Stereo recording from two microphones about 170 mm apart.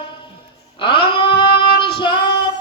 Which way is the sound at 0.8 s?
30° left (ahead or behind).